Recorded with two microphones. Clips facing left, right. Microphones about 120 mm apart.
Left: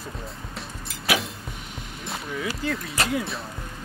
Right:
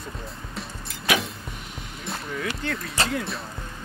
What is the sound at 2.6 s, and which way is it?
Speech, centre (ahead or behind).